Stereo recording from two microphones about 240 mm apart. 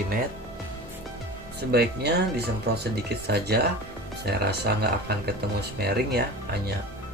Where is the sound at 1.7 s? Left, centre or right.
Right.